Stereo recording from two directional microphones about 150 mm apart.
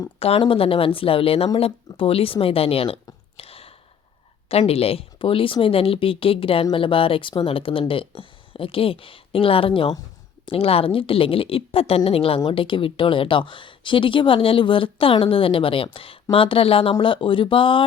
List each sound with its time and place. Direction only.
0.2 s a woman's voice: 40° left (ahead or behind)
3.3 s a sound: 40° left (ahead or behind)
4.4 s a woman's voice: 40° left (ahead or behind)